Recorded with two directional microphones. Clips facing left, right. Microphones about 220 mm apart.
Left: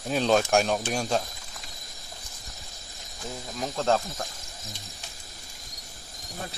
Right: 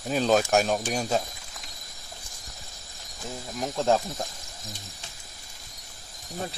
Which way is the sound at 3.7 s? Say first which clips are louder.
Right 1 dB; 15° right (ahead or behind).